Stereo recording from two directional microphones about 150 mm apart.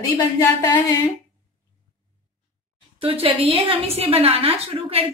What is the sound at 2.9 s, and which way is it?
A woman's voice, 40° right (ahead or behind).